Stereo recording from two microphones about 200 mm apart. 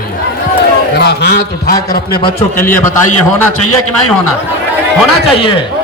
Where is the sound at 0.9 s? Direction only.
55° left (ahead or behind).